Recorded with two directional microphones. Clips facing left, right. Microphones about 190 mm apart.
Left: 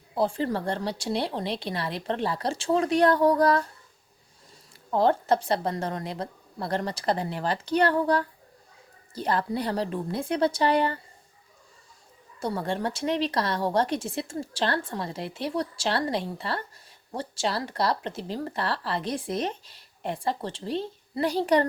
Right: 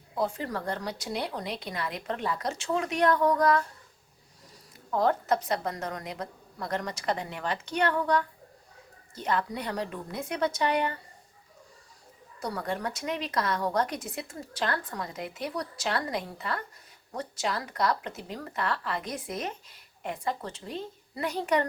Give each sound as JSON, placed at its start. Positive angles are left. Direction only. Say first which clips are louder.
{"t": 0.2, "sound": "speech", "louder": "left 5 dB", "side_deg": 30}
{"t": 4.9, "sound": "speech", "louder": "left 3 dB", "side_deg": 30}
{"t": 12.4, "sound": "speech", "louder": "left 4 dB", "side_deg": 25}